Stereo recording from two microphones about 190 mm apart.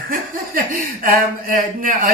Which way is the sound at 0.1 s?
50° right (ahead or behind).